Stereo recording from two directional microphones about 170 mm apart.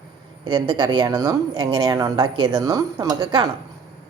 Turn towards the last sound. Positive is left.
turn(degrees=-25)  # may be behind; listen again after turning